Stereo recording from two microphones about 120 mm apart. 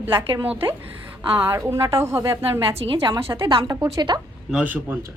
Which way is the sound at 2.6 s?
50° right (ahead or behind).